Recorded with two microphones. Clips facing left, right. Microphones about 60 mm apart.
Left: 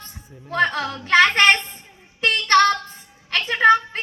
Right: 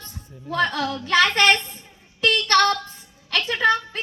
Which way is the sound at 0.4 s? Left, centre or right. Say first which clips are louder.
Left 2 dB; left.